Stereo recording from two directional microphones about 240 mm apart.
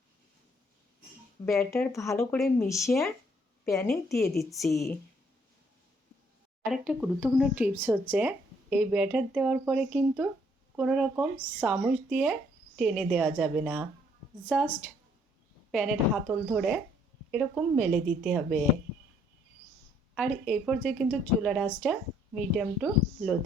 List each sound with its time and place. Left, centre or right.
1.5 s speech: centre
4.4 s speech: centre
6.7 s speech: centre
15.7 s speech: centre
20.1 s speech: centre